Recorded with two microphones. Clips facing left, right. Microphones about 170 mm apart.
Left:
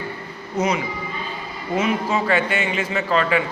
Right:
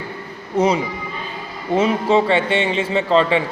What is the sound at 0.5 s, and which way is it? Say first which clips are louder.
A man's voice: right 5 dB; 30° right (ahead or behind).